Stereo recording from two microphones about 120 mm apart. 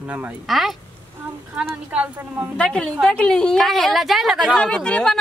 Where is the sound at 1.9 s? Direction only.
15° right (ahead or behind).